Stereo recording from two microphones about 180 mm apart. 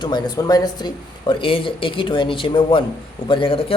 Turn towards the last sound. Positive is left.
turn(degrees=30)  # may be behind; listen again after turning